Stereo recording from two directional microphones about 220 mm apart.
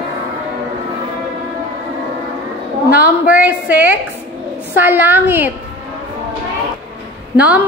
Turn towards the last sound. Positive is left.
turn(degrees=-5)  # may be behind; listen again after turning